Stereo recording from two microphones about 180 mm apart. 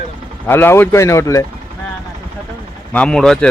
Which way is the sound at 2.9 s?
5° left (ahead or behind).